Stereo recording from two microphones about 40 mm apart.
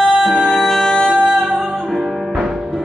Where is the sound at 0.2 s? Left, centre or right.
Centre.